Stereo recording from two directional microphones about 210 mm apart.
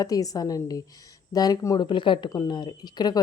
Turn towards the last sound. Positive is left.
turn(degrees=20)  # may be behind; listen again after turning